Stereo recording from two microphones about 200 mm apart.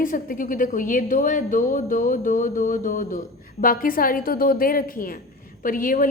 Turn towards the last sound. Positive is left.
turn(degrees=45)  # may be behind; listen again after turning